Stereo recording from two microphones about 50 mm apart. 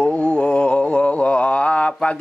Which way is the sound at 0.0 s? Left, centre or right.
Left.